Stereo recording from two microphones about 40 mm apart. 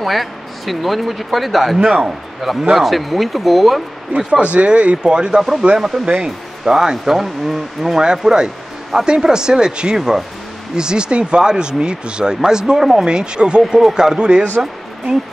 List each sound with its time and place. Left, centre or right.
0.0 s speech: centre
4.3 s speech: right
6.2 s speech: centre
13.7 s speech: centre
14.1 s speech: right